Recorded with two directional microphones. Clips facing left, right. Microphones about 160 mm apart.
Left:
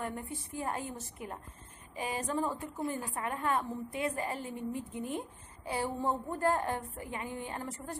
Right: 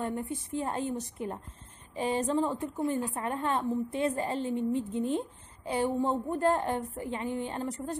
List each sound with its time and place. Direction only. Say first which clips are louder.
0.0 s a woman's voice: right 5 dB; 20° right (ahead or behind)